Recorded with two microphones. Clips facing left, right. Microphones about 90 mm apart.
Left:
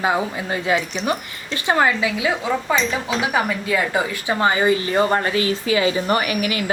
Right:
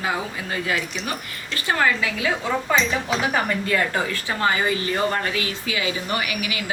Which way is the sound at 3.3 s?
10° left (ahead or behind).